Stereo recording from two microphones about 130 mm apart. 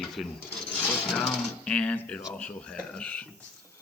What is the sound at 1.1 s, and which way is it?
Speech, 5° left (ahead or behind).